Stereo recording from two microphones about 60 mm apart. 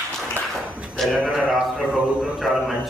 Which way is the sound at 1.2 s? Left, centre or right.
Centre.